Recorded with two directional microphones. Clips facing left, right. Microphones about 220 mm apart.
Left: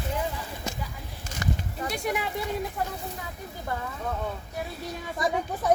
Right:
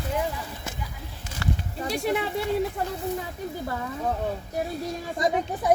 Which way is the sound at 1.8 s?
30° right (ahead or behind).